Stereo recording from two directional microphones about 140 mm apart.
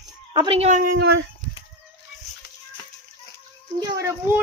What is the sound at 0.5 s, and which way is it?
Speech, 50° right (ahead or behind).